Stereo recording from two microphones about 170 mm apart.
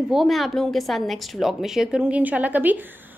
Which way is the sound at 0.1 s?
Centre (ahead or behind).